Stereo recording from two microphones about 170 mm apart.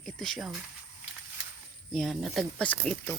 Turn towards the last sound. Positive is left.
turn(degrees=5)  # may be behind; listen again after turning